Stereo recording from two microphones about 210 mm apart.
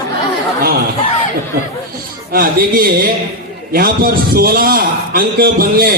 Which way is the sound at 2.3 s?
45° right (ahead or behind).